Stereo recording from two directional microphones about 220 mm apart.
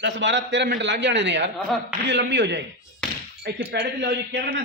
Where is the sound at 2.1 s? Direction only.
55° right (ahead or behind).